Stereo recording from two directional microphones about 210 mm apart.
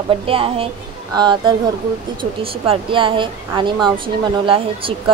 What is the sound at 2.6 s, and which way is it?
A woman's voice, 25° right (ahead or behind).